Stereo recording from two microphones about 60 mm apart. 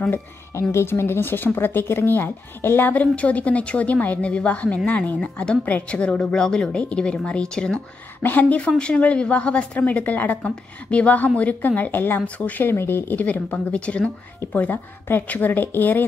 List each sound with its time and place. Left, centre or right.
0.1 s a woman's voice: left
2.9 s a woman's voice: left
5.7 s speech: left
5.9 s a woman's voice: centre
8.2 s speech: left
10.4 s a woman's voice: centre